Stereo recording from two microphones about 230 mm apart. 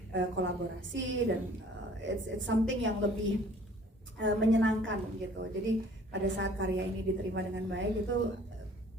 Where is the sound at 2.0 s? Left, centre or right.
Right.